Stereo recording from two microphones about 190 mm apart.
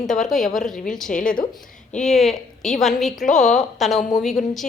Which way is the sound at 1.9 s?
5° left (ahead or behind).